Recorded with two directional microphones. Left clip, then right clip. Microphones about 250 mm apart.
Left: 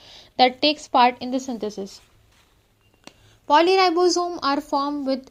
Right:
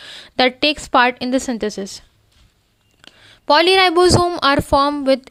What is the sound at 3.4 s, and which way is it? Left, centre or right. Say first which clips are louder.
Speech: right 4 dB; right.